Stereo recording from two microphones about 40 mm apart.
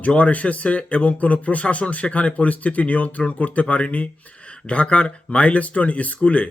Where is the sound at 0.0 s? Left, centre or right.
Left.